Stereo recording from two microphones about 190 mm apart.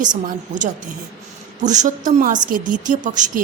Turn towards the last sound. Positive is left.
turn(degrees=-40)  # may be behind; listen again after turning